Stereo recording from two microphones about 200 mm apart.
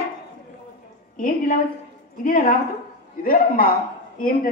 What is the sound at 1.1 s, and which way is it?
A man's voice, 45° left (ahead or behind).